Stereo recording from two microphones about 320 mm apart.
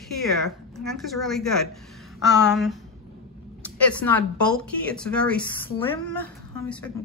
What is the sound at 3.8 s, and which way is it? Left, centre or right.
A woman's voice, centre.